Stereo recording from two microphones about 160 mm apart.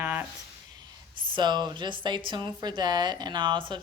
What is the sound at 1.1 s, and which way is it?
A woman's voice, 30° right (ahead or behind).